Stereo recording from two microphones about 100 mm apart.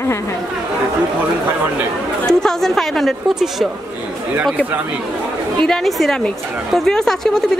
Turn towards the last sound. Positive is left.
turn(degrees=5)  # may be behind; listen again after turning